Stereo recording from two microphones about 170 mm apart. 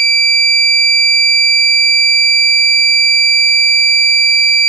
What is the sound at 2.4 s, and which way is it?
Smoke detector, 45° right (ahead or behind).